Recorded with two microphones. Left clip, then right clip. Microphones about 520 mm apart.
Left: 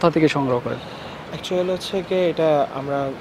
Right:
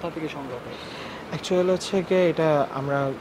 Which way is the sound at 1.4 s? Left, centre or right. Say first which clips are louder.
Even; right.